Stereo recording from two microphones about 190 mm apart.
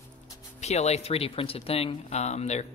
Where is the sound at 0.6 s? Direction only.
35° left (ahead or behind).